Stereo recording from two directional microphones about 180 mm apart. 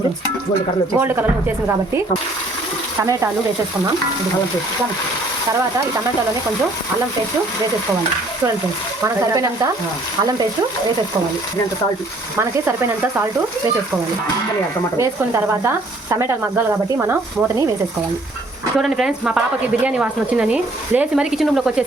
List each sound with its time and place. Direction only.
0.9 s speech: 10° right (ahead or behind)
3.0 s speech: 15° right (ahead or behind)
9.0 s speech: 15° right (ahead or behind)
12.4 s speech: 15° right (ahead or behind)
14.9 s speech: 15° right (ahead or behind)
18.8 s speech: 5° right (ahead or behind)